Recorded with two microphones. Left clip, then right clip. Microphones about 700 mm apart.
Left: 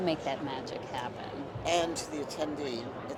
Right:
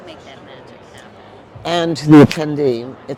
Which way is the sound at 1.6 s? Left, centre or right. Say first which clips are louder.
Right 12 dB; right.